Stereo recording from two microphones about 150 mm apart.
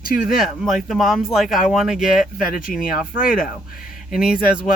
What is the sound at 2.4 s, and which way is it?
A man's voice, 65° left (ahead or behind).